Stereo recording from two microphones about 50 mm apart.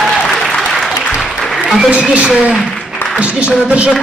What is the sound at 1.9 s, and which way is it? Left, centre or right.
Speech, right.